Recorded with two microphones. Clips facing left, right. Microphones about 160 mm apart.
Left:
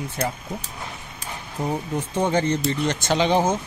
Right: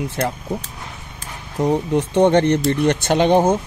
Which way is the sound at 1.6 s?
75° right (ahead or behind).